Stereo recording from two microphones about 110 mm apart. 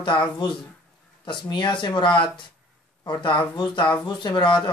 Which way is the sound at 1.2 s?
45° left (ahead or behind).